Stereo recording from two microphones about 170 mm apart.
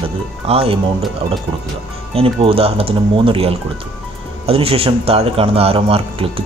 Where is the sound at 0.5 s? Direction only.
35° right (ahead or behind).